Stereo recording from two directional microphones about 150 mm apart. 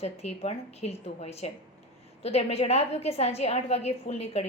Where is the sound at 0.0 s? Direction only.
45° left (ahead or behind).